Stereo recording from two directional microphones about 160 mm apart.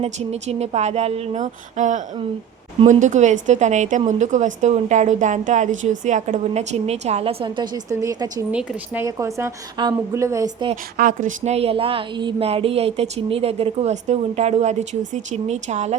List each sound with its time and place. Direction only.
0.0 s a woman's voice: 45° right (ahead or behind); by 10.7 s 20° right (ahead or behind)
10.9 s a woman's voice: 55° right (ahead or behind)